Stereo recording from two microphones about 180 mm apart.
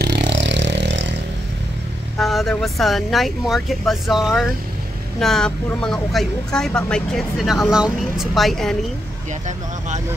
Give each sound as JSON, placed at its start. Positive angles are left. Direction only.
{"t": 0.0, "sound": "vehicle", "side_deg": -75}
{"t": 2.1, "sound": "speech", "side_deg": 0}